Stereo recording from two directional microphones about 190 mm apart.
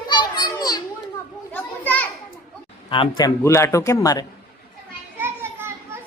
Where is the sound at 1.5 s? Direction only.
10° left (ahead or behind).